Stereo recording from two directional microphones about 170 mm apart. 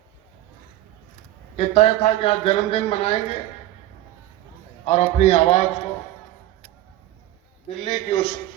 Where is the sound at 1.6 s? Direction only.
35° left (ahead or behind).